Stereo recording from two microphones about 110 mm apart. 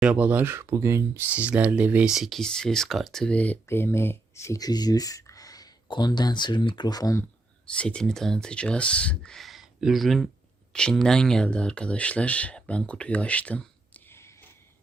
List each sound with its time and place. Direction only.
0.0 s speech: 15° right (ahead or behind); by 7.2 s 35° left (ahead or behind)
7.7 s speech: 10° left (ahead or behind)